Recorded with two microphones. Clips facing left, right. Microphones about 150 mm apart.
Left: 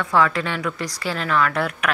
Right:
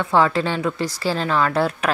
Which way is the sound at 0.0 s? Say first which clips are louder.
Right 2 dB; 30° right (ahead or behind).